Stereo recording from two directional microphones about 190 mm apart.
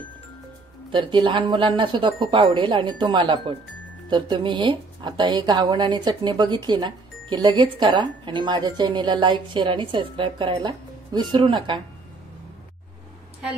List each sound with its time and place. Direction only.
0.9 s a woman's voice: 25° right (ahead or behind)